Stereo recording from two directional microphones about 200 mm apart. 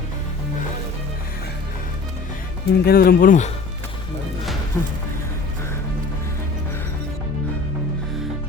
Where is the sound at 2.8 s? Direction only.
50° left (ahead or behind).